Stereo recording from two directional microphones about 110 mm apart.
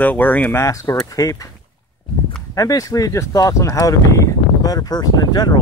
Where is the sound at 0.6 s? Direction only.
30° left (ahead or behind).